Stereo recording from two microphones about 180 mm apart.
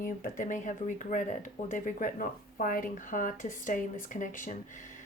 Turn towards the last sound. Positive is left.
turn(degrees=45)  # may be behind; listen again after turning